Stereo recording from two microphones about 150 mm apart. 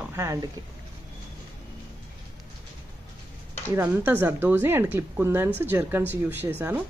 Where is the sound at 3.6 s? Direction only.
15° right (ahead or behind).